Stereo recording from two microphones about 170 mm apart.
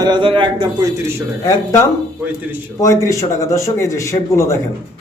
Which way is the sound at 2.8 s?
20° left (ahead or behind).